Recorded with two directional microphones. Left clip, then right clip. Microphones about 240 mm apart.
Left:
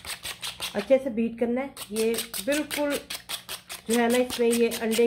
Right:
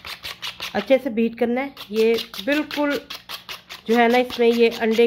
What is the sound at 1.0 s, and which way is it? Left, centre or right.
Speech, right.